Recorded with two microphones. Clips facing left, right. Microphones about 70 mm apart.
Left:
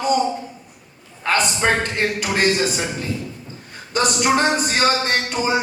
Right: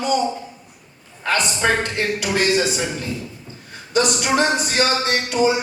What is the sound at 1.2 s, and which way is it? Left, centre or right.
Music, left.